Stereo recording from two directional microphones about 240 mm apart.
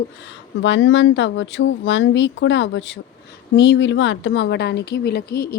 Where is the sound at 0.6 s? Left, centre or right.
Left.